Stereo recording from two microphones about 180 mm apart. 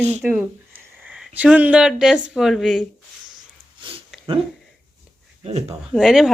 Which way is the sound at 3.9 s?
30° right (ahead or behind).